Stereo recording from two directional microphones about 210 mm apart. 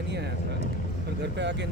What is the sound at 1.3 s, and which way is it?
Speech, 55° right (ahead or behind).